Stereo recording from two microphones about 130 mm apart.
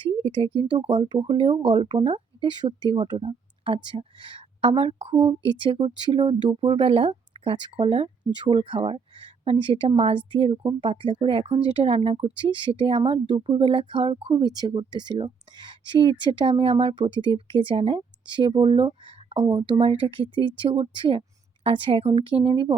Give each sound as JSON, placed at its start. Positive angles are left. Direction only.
{"t": 0.0, "sound": "a woman's voice", "side_deg": -40}